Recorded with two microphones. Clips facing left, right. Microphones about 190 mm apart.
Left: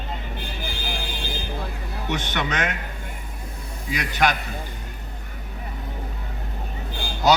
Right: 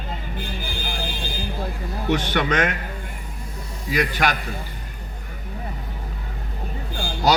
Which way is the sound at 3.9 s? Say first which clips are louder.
Right 1 dB; 50° right (ahead or behind).